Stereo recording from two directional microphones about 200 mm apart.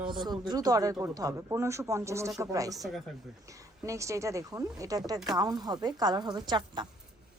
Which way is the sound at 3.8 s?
15° right (ahead or behind).